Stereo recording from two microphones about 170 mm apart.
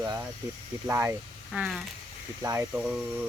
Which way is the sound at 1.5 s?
5° right (ahead or behind).